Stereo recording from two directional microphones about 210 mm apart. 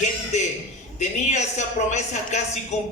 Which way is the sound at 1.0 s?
35° left (ahead or behind).